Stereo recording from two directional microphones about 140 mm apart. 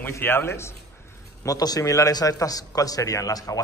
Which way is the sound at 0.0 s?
15° left (ahead or behind).